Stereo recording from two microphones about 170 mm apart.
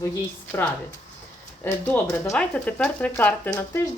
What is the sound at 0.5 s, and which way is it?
Speech, 15° left (ahead or behind).